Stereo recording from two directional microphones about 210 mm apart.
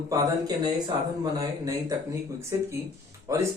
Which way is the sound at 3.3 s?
15° right (ahead or behind).